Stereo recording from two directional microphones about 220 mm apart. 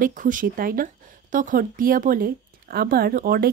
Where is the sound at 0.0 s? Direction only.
35° right (ahead or behind).